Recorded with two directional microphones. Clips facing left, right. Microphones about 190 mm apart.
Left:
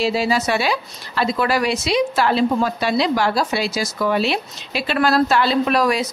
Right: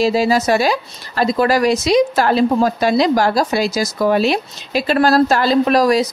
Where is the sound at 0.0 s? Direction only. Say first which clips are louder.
Right 4 dB; 40° right (ahead or behind).